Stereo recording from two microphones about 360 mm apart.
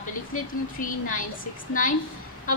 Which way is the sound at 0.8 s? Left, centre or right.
Left.